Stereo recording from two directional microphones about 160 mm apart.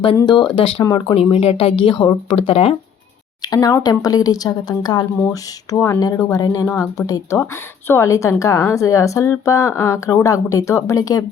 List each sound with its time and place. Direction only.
0.2 s speech: 30° left (ahead or behind)
3.4 s a woman's voice: 25° left (ahead or behind)
5.3 s a woman's voice: 15° left (ahead or behind)